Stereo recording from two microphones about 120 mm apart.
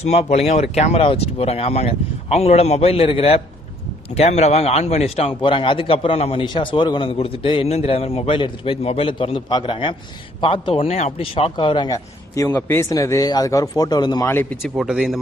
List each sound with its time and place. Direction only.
0.0 s speech: 65° left (ahead or behind)
4.1 s speech: 65° left (ahead or behind)
6.4 s a man's voice: 45° left (ahead or behind)
11.9 s a man's voice: 30° left (ahead or behind)
12.5 s speech: 15° left (ahead or behind)
12.9 s speech: 30° left (ahead or behind)
14.3 s speech: 20° left (ahead or behind)
14.6 s a man's voice: 5° right (ahead or behind)